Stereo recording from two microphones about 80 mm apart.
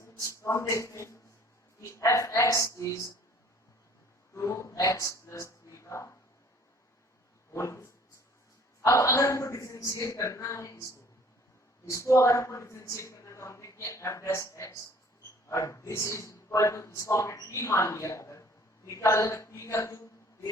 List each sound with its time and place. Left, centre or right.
0.2 s a man's voice: left
4.4 s speech: left
7.5 s speech: left
8.8 s a man's voice: left
11.9 s a man's voice: left